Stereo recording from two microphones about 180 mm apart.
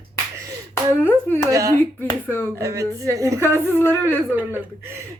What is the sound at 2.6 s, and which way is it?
Speech, 15° right (ahead or behind).